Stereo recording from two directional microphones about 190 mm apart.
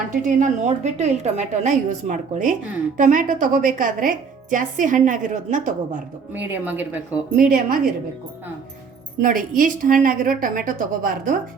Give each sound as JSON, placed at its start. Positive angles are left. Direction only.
{"t": 0.1, "sound": "a woman's voice", "side_deg": -45}
{"t": 6.3, "sound": "speech", "side_deg": -10}
{"t": 7.3, "sound": "a woman's voice", "side_deg": -45}
{"t": 9.2, "sound": "a woman's voice", "side_deg": -45}